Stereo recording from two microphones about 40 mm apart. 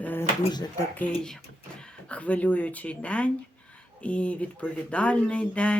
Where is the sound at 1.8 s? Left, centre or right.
Left.